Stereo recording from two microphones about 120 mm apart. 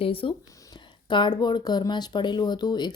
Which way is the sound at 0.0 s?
50° left (ahead or behind).